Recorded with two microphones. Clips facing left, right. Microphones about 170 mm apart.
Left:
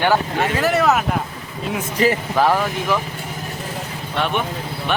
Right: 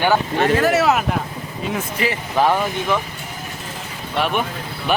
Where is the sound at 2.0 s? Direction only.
40° left (ahead or behind).